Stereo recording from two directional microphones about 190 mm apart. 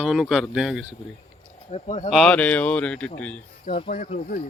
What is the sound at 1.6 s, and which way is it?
Speech, 35° left (ahead or behind).